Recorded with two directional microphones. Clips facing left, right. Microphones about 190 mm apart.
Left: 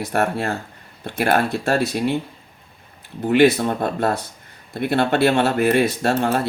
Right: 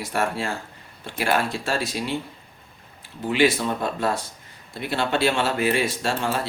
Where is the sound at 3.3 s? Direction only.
55° left (ahead or behind).